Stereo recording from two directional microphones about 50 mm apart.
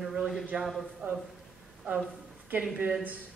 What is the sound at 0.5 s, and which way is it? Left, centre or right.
Speech, right.